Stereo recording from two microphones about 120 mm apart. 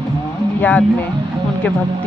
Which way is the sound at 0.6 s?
15° left (ahead or behind).